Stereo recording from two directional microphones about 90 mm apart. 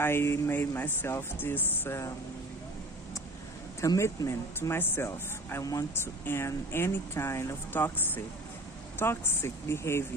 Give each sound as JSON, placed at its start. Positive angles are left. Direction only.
{"t": 0.0, "sound": "speech", "side_deg": 25}
{"t": 3.8, "sound": "speech", "side_deg": 35}